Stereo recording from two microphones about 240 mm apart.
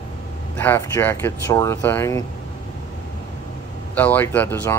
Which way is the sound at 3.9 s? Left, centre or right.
Centre.